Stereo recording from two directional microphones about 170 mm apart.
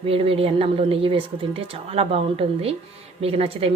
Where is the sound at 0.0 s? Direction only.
35° right (ahead or behind).